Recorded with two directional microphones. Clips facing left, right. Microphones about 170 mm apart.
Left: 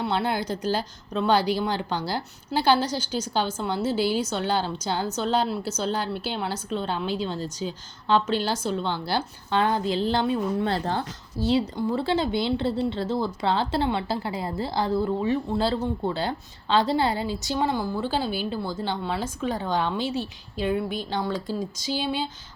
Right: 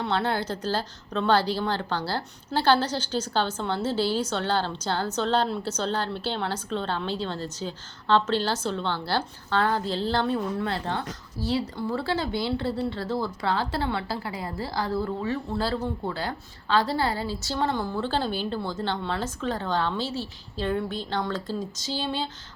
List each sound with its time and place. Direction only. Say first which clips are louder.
0.0 s a woman's voice: left 1 dB; 10° left (ahead or behind)
10.7 s speech: left 3 dB; 35° left (ahead or behind)
11.3 s speech: left 4 dB; 20° left (ahead or behind)